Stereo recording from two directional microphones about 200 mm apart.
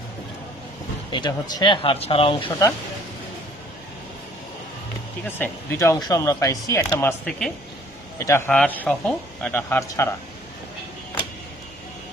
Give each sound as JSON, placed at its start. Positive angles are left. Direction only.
{"t": 1.1, "sound": "speech", "side_deg": 20}
{"t": 5.4, "sound": "speech", "side_deg": 15}
{"t": 7.3, "sound": "speech", "side_deg": 5}